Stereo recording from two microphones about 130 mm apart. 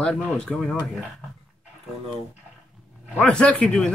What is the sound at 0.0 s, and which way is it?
Speech, 5° left (ahead or behind).